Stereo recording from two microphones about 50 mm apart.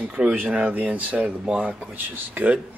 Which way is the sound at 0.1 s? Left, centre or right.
Right.